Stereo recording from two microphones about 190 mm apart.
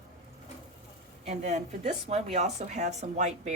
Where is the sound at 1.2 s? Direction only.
35° right (ahead or behind).